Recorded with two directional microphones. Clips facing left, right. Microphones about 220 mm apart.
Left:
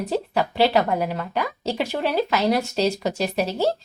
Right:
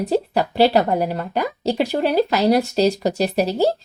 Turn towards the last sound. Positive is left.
turn(degrees=-35)  # may be behind; listen again after turning